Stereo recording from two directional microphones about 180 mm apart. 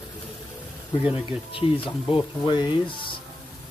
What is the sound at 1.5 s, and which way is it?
Speech, 30° left (ahead or behind).